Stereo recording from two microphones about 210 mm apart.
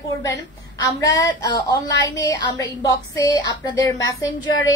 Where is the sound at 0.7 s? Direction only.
15° left (ahead or behind).